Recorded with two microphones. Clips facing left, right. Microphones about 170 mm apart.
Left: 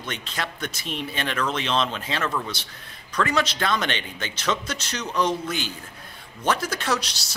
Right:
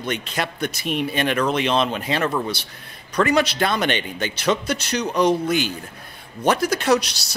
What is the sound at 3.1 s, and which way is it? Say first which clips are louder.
A man's voice: right 5 dB; 15° right (ahead or behind).